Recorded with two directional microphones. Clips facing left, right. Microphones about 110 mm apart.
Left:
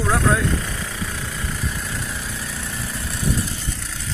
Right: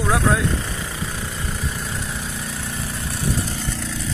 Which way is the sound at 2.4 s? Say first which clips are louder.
Right 1 dB; 25° right (ahead or behind).